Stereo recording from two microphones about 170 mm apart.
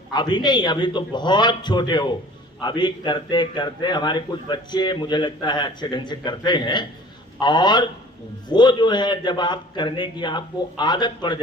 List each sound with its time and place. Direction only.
0.1 s a man's voice: 25° left (ahead or behind)